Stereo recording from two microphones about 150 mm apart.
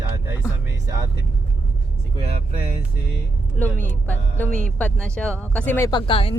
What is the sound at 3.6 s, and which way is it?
Speech, 10° left (ahead or behind).